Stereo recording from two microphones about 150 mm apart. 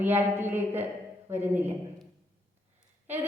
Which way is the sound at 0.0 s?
15° right (ahead or behind).